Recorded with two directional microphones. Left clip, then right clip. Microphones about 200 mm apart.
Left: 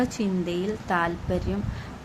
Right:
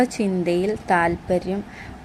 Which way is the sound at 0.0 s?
20° right (ahead or behind).